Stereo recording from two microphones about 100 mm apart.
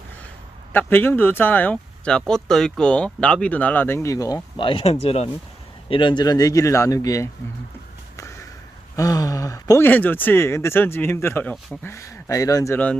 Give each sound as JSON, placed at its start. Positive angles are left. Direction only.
{"t": 0.7, "sound": "speech", "side_deg": 20}
{"t": 4.5, "sound": "speech", "side_deg": 60}
{"t": 5.9, "sound": "speech", "side_deg": 55}
{"t": 8.1, "sound": "a sound", "side_deg": 30}
{"t": 9.0, "sound": "speech", "side_deg": 35}
{"t": 9.8, "sound": "speech", "side_deg": 20}
{"t": 12.7, "sound": "speech", "side_deg": 15}